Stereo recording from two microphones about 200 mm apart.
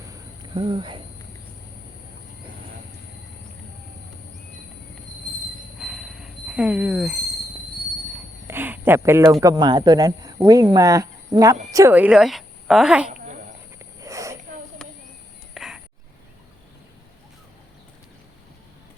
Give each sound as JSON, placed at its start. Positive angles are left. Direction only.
{"t": 0.1, "sound": "cricket", "side_deg": -25}
{"t": 5.8, "sound": "train wheels squealing", "side_deg": 0}
{"t": 8.4, "sound": "cricket", "side_deg": -10}
{"t": 9.4, "sound": "speech", "side_deg": -20}
{"t": 13.1, "sound": "cricket", "side_deg": -35}
{"t": 13.7, "sound": "cricket", "side_deg": -15}
{"t": 15.5, "sound": "a sound", "side_deg": -5}